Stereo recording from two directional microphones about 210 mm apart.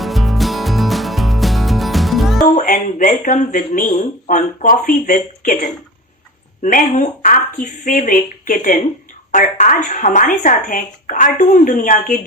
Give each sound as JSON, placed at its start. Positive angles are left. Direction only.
{"t": 0.0, "sound": "music", "side_deg": 0}
{"t": 2.6, "sound": "speech", "side_deg": 40}